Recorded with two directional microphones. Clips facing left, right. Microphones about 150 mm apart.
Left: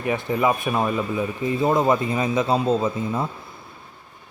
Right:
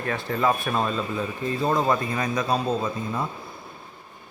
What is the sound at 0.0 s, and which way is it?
Speech, 15° left (ahead or behind).